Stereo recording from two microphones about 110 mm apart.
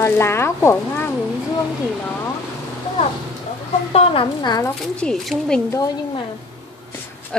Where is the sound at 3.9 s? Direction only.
60° left (ahead or behind).